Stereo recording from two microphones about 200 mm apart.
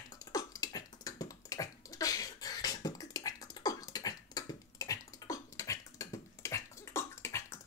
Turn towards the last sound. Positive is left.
turn(degrees=15)  # may be behind; listen again after turning